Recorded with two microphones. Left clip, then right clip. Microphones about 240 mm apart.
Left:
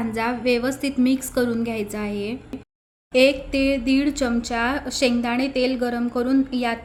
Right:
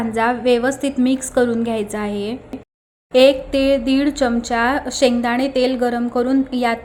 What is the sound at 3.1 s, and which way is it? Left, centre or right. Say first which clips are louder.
A woman's voice: right 5 dB; centre.